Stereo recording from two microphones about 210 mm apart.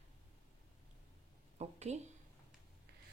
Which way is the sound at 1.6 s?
30° right (ahead or behind).